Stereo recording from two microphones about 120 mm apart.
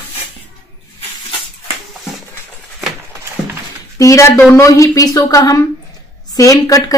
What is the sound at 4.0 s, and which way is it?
A woman's voice, 25° left (ahead or behind).